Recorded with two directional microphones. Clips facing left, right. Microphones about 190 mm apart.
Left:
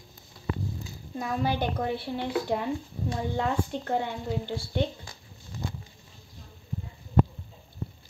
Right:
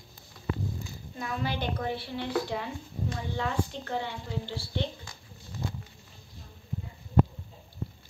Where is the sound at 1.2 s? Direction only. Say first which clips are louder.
Left 5 dB; 45° left (ahead or behind).